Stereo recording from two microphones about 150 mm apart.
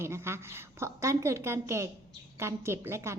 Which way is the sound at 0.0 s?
15° right (ahead or behind).